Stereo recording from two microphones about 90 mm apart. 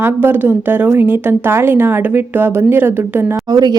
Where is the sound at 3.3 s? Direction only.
45° right (ahead or behind).